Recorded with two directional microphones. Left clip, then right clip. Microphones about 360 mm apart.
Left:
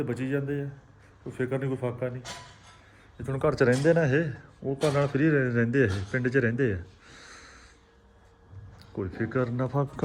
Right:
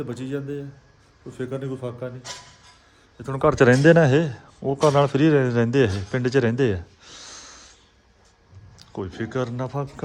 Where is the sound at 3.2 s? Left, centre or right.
Right.